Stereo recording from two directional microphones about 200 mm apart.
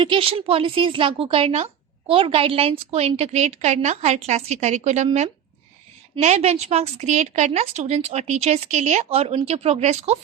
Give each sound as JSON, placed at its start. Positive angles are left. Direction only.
{"t": 0.0, "sound": "a woman's voice", "side_deg": -25}